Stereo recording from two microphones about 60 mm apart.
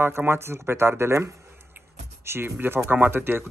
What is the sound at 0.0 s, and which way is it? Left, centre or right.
Speech, right.